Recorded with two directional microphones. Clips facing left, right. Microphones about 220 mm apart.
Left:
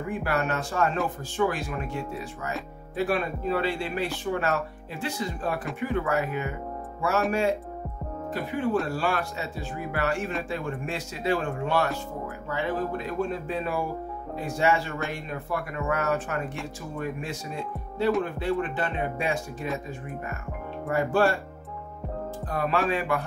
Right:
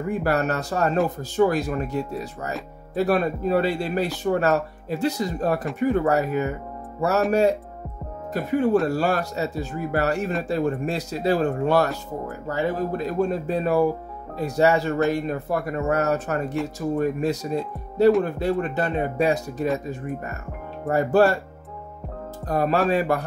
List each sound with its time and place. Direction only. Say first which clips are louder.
0.1 s speech: right 5 dB; 40° right (ahead or behind)
8.8 s speech: right 6 dB; 40° right (ahead or behind)
20.8 s speech: right 5 dB; 40° right (ahead or behind)
22.5 s speech: right 6 dB; 40° right (ahead or behind)